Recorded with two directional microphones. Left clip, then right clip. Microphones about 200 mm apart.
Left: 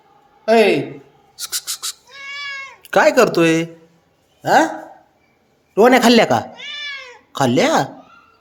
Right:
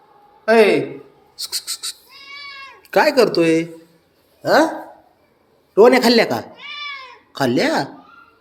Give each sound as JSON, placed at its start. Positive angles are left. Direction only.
{"t": 0.4, "sound": "speech", "side_deg": 10}
{"t": 1.4, "sound": "a sound", "side_deg": 25}
{"t": 2.8, "sound": "speech", "side_deg": 30}
{"t": 5.7, "sound": "a man's voice", "side_deg": 30}
{"t": 6.6, "sound": "cat", "side_deg": 10}
{"t": 7.3, "sound": "a man's voice", "side_deg": 20}